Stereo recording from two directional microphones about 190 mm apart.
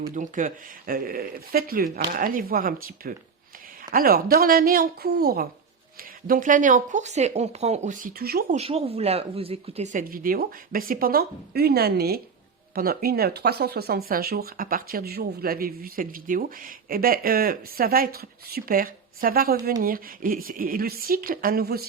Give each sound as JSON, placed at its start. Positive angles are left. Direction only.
{"t": 0.1, "sound": "speech", "side_deg": -40}
{"t": 8.5, "sound": "speech", "side_deg": -30}